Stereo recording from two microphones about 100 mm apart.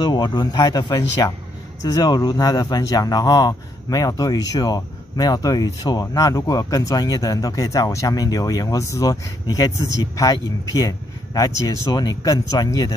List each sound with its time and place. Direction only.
0.0 s speech: 45° left (ahead or behind)